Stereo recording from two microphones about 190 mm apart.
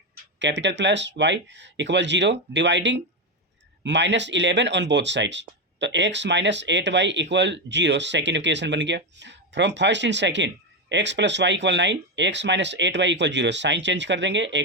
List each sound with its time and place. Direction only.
0.3 s speech: 70° right (ahead or behind)